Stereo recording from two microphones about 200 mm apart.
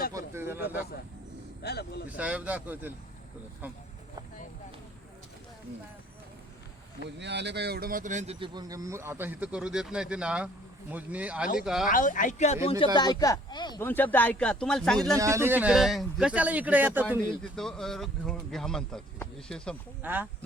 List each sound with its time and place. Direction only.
0.1 s a sound: 15° right (ahead or behind)
1.6 s speech: 55° left (ahead or behind)
2.0 s speech: 5° right (ahead or behind)
7.0 s speech: 60° right (ahead or behind); by 11.9 s 5° right (ahead or behind)
11.9 s speech: 40° left (ahead or behind)
12.8 s speech: 20° left (ahead or behind)
13.8 s speech: 10° left (ahead or behind)
15.2 s speech: 15° right (ahead or behind)
17.6 s speech: centre (ahead or behind)
20.0 s speech: 10° right (ahead or behind)